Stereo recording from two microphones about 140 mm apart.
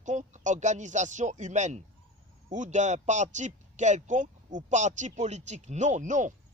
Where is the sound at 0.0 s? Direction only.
60° right (ahead or behind).